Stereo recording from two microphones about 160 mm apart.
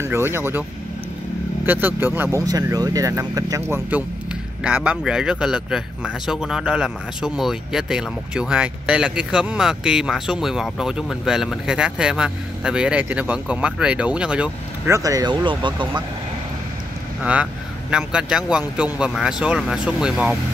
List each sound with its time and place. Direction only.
0.0 s speech: 15° right (ahead or behind)
1.7 s speech: 10° right (ahead or behind)
2.4 s speech: 25° right (ahead or behind); by 15.0 s 5° right (ahead or behind)
15.0 s speech: 20° right (ahead or behind)
17.2 s speech: 10° right (ahead or behind)